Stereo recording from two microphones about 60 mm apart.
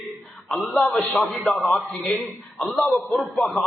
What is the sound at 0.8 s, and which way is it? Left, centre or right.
A man's voice, centre.